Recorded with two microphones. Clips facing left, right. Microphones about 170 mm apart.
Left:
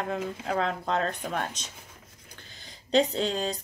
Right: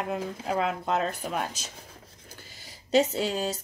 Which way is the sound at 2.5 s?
5° right (ahead or behind).